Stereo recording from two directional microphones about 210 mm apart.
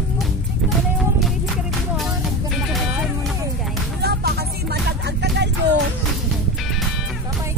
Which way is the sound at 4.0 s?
50° right (ahead or behind).